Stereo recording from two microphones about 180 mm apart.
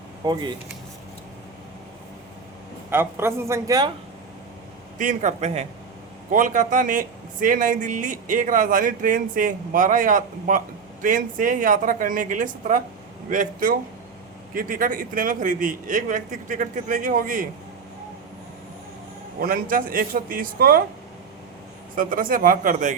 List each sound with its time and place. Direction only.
0.2 s speech: 20° right (ahead or behind)
2.9 s speech: 15° right (ahead or behind)
4.9 s speech: 45° right (ahead or behind)
19.4 s speech: 50° right (ahead or behind)
21.9 s speech: 50° right (ahead or behind)